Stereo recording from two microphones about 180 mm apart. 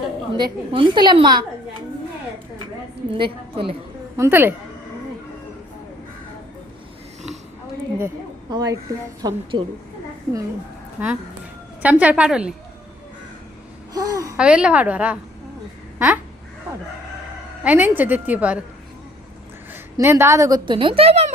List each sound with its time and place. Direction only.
0.3 s a woman's voice: 25° right (ahead or behind)
3.1 s a woman's voice: 30° right (ahead or behind)
4.2 s a woman's voice: 10° right (ahead or behind)
7.9 s a woman's voice: 20° right (ahead or behind)
11.0 s a woman's voice: 10° right (ahead or behind)
13.9 s babbling: 20° right (ahead or behind)
14.3 s a woman's voice: 5° right (ahead or behind)
16.0 s a sound: 10° right (ahead or behind)
17.6 s a woman's voice: 10° right (ahead or behind)
20.0 s a woman's voice: 15° right (ahead or behind); by 21.3 s 35° right (ahead or behind)